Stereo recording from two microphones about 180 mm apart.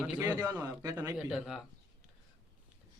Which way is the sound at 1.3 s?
Centre (ahead or behind).